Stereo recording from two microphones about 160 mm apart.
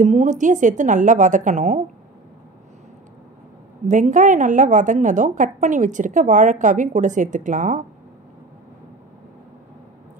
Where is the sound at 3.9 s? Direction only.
50° right (ahead or behind).